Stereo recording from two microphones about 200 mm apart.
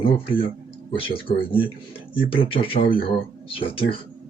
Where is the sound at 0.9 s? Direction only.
25° left (ahead or behind).